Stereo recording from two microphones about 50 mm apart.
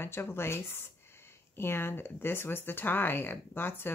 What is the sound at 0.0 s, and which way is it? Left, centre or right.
Speech, left.